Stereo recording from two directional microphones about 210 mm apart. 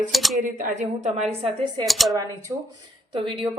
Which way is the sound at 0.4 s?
35° right (ahead or behind).